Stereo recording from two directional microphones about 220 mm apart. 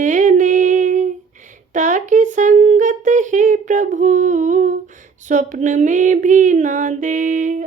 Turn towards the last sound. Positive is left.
turn(degrees=-35)  # may be behind; listen again after turning